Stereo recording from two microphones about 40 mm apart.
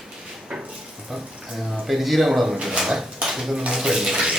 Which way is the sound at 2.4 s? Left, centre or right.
Centre.